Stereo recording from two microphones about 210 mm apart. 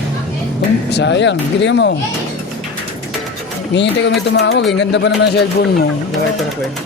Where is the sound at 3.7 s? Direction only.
55° left (ahead or behind).